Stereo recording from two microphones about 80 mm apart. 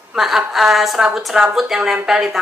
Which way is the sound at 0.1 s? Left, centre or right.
Centre.